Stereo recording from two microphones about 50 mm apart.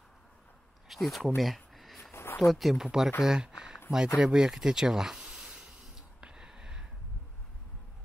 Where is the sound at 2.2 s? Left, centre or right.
Left.